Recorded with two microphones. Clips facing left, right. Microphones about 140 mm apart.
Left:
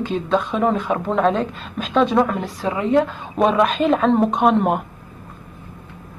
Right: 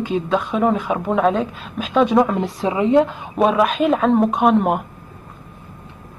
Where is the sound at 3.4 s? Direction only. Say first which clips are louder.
Right 1 dB; 5° right (ahead or behind).